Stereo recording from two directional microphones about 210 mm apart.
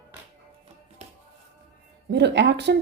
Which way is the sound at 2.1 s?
55° right (ahead or behind).